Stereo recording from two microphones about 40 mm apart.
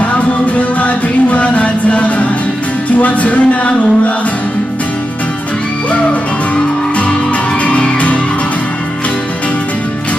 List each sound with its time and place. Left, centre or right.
0.6 s music: left
7.6 s music: left